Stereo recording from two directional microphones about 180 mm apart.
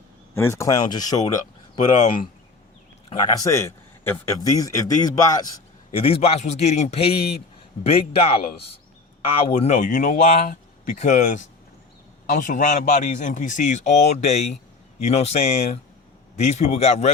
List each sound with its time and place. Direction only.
0.3 s speech: 15° left (ahead or behind)
3.1 s a man's voice: 20° left (ahead or behind)
5.9 s a man's voice: 30° left (ahead or behind)
9.6 s a man's voice: 40° left (ahead or behind)